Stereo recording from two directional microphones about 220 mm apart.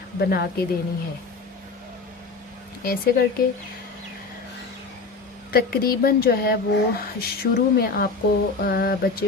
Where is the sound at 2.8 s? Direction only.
40° left (ahead or behind).